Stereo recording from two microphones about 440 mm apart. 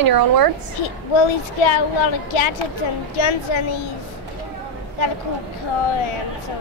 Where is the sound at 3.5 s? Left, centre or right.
Left.